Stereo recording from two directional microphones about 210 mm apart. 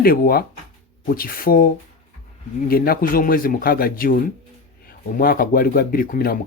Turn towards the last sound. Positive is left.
turn(degrees=45)  # may be behind; listen again after turning